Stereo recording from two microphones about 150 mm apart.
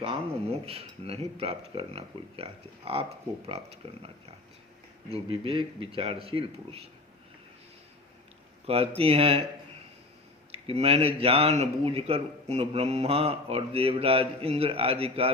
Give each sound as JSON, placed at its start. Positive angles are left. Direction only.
{"t": 0.0, "sound": "speech", "side_deg": -40}
{"t": 5.1, "sound": "speech", "side_deg": -40}
{"t": 8.6, "sound": "speech", "side_deg": -40}
{"t": 10.5, "sound": "speech", "side_deg": -40}